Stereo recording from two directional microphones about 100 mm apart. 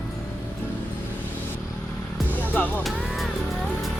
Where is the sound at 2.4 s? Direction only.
15° left (ahead or behind).